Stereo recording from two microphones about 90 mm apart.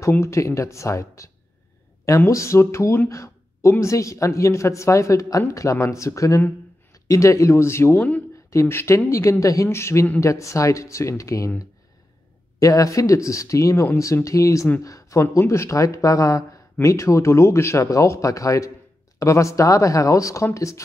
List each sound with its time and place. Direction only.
0.2 s speech: 30° left (ahead or behind)
3.1 s a sound: 35° left (ahead or behind)
3.8 s speech: 35° left (ahead or behind)
12.5 s speech: 40° left (ahead or behind)